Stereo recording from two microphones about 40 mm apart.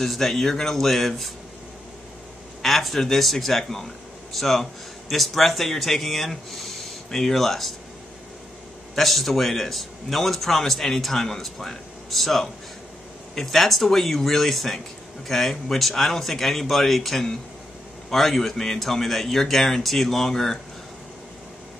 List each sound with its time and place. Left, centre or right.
0.0 s a man's voice: centre
2.6 s speech: centre
8.9 s a man's voice: centre